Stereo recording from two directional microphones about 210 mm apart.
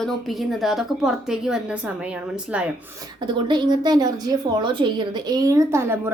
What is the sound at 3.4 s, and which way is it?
A woman's voice, 20° right (ahead or behind).